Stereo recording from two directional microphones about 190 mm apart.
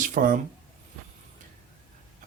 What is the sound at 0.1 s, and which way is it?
Speech, 45° right (ahead or behind).